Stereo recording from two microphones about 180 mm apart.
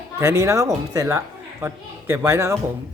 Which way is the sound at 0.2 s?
15° right (ahead or behind).